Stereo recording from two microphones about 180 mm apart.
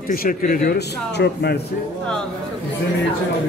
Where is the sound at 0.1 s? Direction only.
50° left (ahead or behind).